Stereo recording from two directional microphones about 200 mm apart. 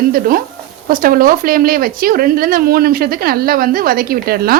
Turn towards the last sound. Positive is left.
turn(degrees=-50)  # may be behind; listen again after turning